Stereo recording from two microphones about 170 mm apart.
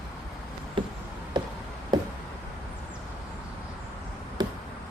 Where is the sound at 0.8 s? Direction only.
30° right (ahead or behind).